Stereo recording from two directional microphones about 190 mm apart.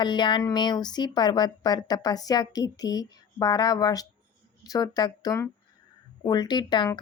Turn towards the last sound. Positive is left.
turn(degrees=25)  # may be behind; listen again after turning